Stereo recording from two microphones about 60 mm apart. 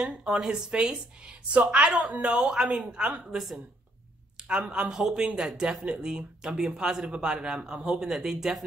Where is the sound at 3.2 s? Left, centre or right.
Centre.